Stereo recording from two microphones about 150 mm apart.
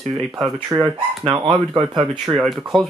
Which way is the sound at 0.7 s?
20° right (ahead or behind).